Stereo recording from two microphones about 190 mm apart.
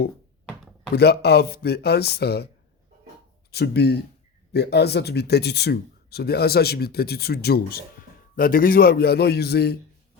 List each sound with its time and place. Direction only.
0.9 s speech: 60° left (ahead or behind)
3.5 s speech: 60° left (ahead or behind)